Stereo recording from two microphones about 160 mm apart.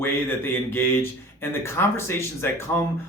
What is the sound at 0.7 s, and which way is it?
Speech, 15° left (ahead or behind).